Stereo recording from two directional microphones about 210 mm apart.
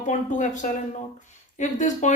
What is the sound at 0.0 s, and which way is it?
Speech, 35° left (ahead or behind).